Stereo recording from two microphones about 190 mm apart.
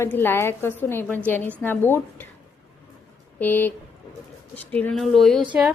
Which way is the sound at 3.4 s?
10° left (ahead or behind).